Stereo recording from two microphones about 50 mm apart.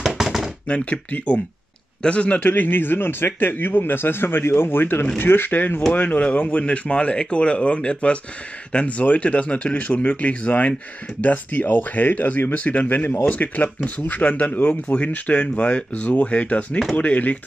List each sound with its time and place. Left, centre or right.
0.2 s knock: centre
0.7 s a man's voice: left
5.9 s speech: left